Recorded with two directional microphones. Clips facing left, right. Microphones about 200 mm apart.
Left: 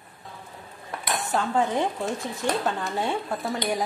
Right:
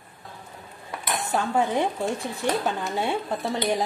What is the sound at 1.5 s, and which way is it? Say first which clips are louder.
A woman's voice: right 1 dB; 15° right (ahead or behind).